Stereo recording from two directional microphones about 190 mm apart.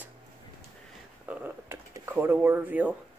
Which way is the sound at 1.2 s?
10° right (ahead or behind).